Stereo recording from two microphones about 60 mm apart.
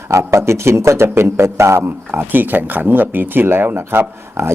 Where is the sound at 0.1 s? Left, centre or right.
Right.